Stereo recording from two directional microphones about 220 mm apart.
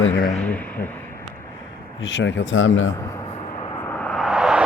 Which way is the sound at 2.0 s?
55° left (ahead or behind).